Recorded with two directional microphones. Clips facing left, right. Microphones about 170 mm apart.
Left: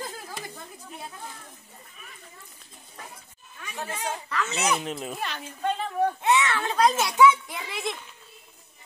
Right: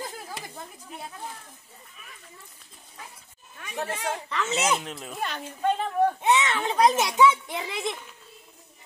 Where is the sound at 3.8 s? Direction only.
65° right (ahead or behind).